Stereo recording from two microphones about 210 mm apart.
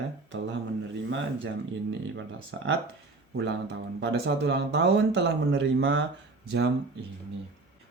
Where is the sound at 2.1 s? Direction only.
60° right (ahead or behind).